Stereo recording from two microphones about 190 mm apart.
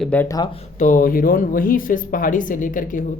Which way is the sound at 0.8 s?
45° left (ahead or behind).